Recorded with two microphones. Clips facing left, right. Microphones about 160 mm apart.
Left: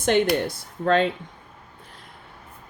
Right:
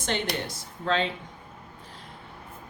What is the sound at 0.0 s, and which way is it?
A woman's voice, 55° left (ahead or behind).